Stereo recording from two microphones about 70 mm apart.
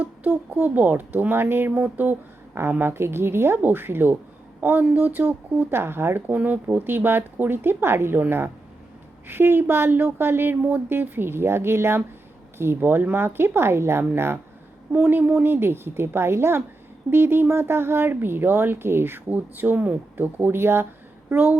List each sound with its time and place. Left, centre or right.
0.0 s a woman's voice: right